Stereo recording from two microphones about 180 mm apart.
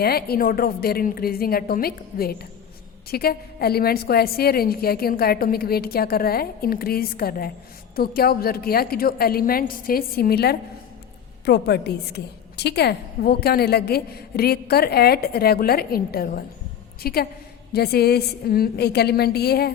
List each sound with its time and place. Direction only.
0.0 s a woman's voice: 60° left (ahead or behind)